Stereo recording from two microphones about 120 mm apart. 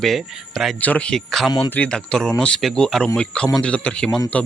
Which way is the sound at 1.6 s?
15° left (ahead or behind).